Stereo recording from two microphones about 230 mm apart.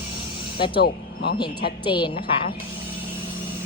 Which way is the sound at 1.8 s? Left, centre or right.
Left.